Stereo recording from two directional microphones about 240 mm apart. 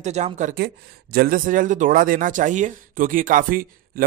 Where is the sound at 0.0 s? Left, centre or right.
Right.